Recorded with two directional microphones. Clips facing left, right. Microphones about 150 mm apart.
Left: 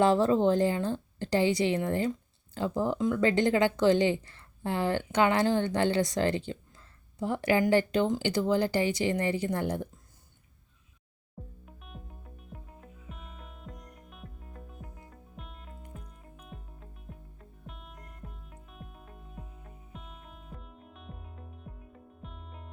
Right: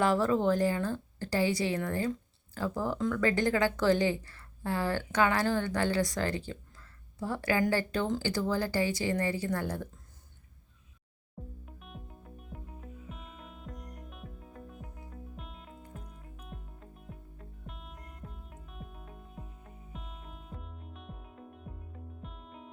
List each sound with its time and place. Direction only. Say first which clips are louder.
0.0 s speech: left 4 dB; 25° left (ahead or behind)
11.6 s music: right 1 dB; centre (ahead or behind)